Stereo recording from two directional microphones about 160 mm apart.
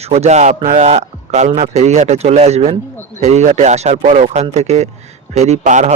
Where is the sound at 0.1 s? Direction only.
45° right (ahead or behind).